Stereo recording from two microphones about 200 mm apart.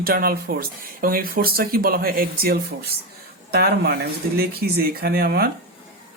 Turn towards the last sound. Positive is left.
turn(degrees=-50)  # may be behind; listen again after turning